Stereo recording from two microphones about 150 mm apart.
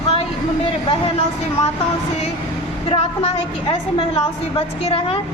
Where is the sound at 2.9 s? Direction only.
40° left (ahead or behind).